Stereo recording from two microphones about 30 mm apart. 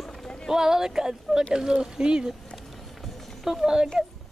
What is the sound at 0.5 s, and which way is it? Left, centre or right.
Speech, centre.